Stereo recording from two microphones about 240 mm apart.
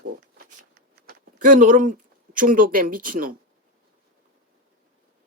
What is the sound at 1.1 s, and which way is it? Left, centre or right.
Speech, right.